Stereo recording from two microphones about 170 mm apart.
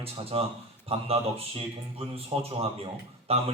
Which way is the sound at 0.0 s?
35° right (ahead or behind).